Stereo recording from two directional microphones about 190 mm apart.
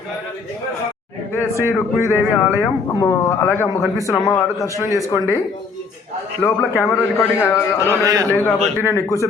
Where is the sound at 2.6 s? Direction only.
15° left (ahead or behind).